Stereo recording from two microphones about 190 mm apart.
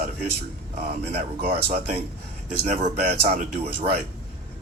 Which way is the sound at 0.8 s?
35° right (ahead or behind).